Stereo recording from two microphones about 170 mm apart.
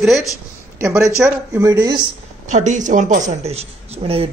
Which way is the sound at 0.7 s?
15° right (ahead or behind).